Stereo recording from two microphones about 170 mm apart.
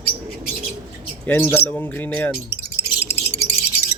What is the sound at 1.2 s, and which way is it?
Speech, 10° left (ahead or behind).